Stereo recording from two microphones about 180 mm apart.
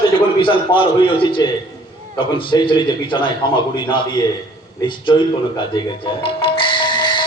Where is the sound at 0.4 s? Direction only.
30° left (ahead or behind).